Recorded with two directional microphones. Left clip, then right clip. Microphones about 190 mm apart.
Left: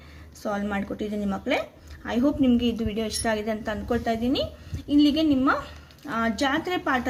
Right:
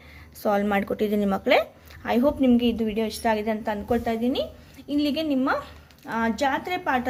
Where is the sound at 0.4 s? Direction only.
30° right (ahead or behind).